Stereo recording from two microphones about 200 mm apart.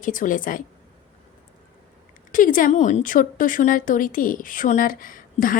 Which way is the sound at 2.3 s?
40° left (ahead or behind).